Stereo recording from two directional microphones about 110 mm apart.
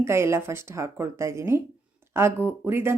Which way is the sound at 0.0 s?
25° right (ahead or behind).